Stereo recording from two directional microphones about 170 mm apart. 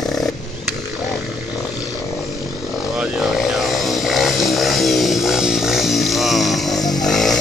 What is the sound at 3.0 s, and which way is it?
Vehicle, centre (ahead or behind).